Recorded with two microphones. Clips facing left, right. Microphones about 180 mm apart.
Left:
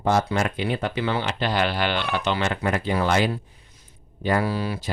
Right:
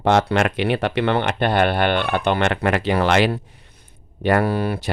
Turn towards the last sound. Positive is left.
turn(degrees=-55)  # may be behind; listen again after turning